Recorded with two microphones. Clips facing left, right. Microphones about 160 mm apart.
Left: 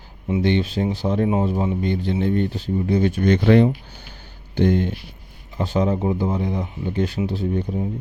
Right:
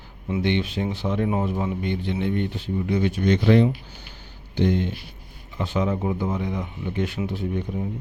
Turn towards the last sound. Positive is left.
turn(degrees=30)  # may be behind; listen again after turning